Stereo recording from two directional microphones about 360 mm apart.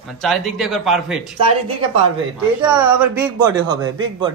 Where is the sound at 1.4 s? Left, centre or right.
Centre.